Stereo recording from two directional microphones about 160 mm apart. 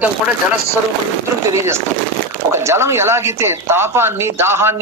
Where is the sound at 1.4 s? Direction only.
15° right (ahead or behind).